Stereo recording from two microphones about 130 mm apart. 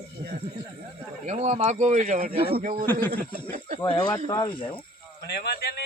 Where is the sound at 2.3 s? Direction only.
50° right (ahead or behind).